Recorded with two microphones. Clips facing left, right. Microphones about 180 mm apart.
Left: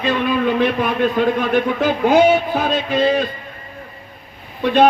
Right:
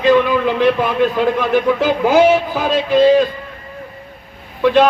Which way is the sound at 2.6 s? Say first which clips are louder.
Right 4 dB; 90° right.